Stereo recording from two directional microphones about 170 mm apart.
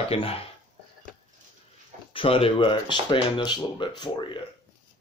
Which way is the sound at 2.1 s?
30° left (ahead or behind).